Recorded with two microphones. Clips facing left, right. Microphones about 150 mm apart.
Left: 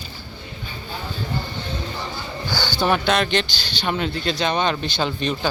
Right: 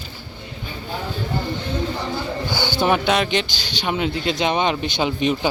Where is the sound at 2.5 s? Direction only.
20° right (ahead or behind).